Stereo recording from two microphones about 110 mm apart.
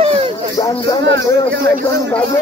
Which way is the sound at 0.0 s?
60° right (ahead or behind).